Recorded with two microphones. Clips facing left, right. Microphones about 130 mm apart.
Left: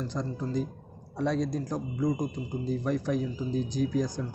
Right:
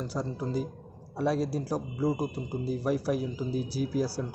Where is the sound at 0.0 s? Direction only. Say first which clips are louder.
Even; 10° right (ahead or behind).